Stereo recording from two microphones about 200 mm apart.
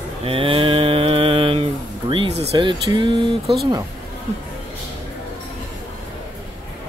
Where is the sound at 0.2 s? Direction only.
25° right (ahead or behind).